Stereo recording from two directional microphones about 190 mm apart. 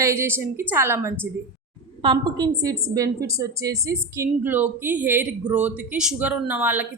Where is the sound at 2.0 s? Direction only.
25° right (ahead or behind).